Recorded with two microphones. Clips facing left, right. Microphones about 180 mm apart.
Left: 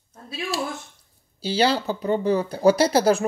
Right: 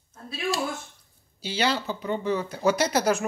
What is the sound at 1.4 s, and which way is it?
Speech, 35° left (ahead or behind).